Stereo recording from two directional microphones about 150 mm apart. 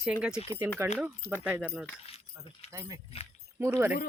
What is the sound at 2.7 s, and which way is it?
Speech, 20° right (ahead or behind).